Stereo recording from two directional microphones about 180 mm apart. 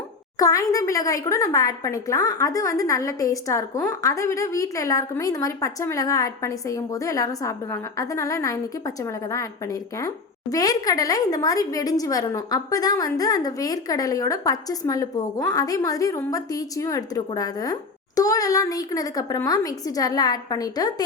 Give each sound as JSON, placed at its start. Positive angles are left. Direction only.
{"t": 0.3, "sound": "speech", "side_deg": 20}
{"t": 10.5, "sound": "speech", "side_deg": 20}